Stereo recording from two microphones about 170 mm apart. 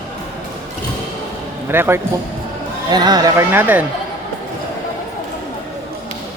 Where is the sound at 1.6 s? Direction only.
15° right (ahead or behind).